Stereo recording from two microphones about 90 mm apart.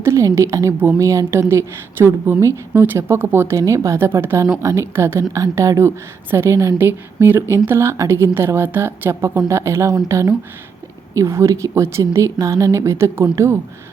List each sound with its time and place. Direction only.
0.0 s a woman's voice: 30° right (ahead or behind)
6.7 s speech: 25° right (ahead or behind)